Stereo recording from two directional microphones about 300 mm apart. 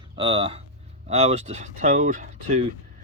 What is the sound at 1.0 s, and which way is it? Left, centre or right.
Speech, centre.